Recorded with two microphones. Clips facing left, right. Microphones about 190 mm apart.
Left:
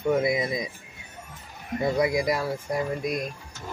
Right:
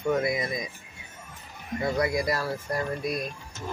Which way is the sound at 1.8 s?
20° left (ahead or behind).